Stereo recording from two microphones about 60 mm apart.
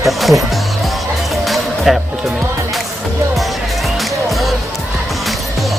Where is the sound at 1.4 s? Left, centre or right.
Centre.